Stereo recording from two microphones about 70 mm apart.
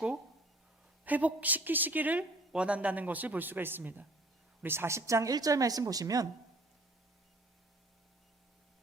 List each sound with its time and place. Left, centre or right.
1.0 s a woman's voice: right
5.3 s speech: right